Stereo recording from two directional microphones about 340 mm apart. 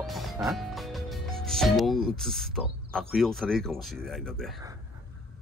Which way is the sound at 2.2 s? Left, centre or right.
Centre.